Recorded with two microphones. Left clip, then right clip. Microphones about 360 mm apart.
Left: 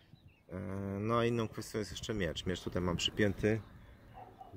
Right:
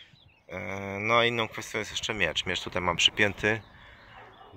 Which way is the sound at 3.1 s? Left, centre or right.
Right.